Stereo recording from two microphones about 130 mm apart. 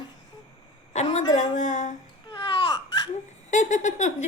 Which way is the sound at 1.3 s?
70° left (ahead or behind).